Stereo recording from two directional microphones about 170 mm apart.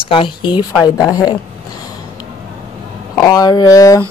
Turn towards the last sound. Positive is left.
turn(degrees=20)  # may be behind; listen again after turning